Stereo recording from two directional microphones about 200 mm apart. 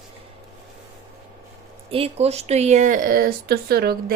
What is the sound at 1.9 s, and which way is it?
Speech, 30° right (ahead or behind).